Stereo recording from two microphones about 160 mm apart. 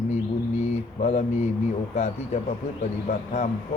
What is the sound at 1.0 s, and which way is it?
Speech, 50° left (ahead or behind).